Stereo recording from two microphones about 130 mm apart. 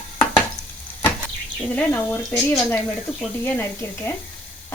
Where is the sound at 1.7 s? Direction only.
10° left (ahead or behind).